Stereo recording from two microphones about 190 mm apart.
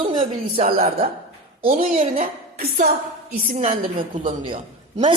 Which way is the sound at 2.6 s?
50° right (ahead or behind).